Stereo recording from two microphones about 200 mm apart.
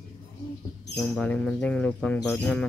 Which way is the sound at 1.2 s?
5° left (ahead or behind).